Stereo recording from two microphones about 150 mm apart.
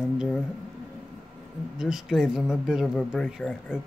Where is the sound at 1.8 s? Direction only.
5° right (ahead or behind).